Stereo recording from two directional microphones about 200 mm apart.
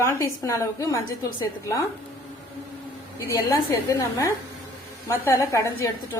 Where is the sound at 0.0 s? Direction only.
15° left (ahead or behind).